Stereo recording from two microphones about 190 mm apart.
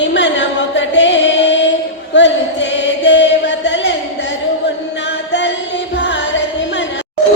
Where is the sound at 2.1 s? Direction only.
70° left (ahead or behind).